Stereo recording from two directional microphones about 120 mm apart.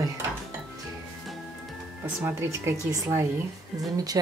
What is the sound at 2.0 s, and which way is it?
A woman's voice, 20° right (ahead or behind).